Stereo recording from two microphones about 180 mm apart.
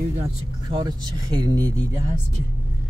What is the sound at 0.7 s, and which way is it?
Speech, 25° right (ahead or behind).